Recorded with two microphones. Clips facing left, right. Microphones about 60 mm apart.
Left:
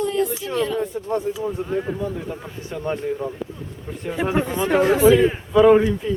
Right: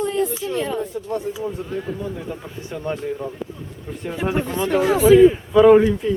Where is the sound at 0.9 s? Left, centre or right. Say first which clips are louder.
Left 2 dB; left.